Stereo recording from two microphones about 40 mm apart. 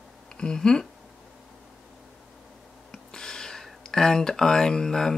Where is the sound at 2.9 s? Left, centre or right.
Centre.